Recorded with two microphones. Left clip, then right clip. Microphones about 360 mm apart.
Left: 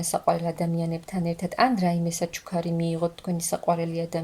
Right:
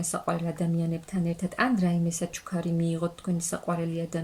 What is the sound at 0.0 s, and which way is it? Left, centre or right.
Speech, centre.